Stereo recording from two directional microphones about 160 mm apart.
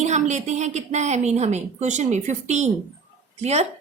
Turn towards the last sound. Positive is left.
turn(degrees=-45)  # may be behind; listen again after turning